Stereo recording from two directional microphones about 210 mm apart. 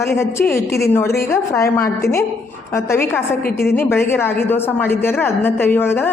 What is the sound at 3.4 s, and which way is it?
Speech, 50° left (ahead or behind).